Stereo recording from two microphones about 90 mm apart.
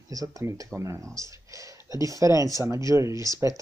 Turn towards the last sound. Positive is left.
turn(degrees=-35)  # may be behind; listen again after turning